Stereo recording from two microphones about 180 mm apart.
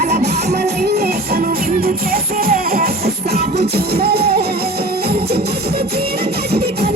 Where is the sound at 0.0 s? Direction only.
35° right (ahead or behind).